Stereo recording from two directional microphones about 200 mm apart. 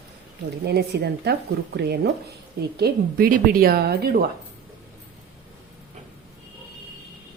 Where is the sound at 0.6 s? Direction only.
55° right (ahead or behind).